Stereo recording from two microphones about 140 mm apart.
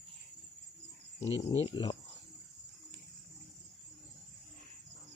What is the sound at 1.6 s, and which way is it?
Speech, 35° left (ahead or behind).